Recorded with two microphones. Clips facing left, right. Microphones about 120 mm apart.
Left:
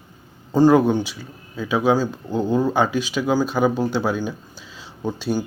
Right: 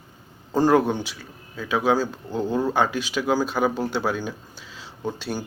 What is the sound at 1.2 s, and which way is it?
Speech, 10° left (ahead or behind).